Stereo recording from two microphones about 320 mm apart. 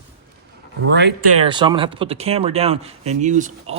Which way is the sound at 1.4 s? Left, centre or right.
Centre.